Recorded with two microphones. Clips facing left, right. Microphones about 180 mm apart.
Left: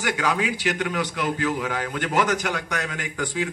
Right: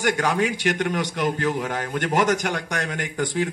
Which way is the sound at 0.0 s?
45° right (ahead or behind).